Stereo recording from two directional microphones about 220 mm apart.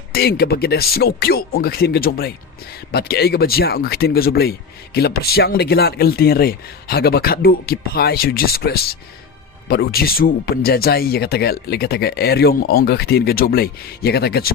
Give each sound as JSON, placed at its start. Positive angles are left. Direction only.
{"t": 0.1, "sound": "speech", "side_deg": 45}